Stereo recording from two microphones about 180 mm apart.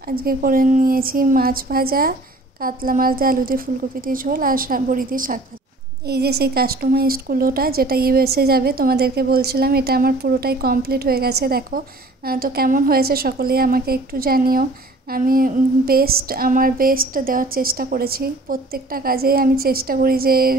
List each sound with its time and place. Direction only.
0.0 s speech: 55° right (ahead or behind)
6.0 s a woman's voice: 60° right (ahead or behind)